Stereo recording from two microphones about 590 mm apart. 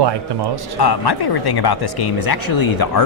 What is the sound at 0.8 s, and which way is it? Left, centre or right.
Speech, left.